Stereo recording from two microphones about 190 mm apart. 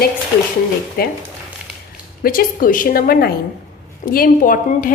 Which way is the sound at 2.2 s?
50° left (ahead or behind).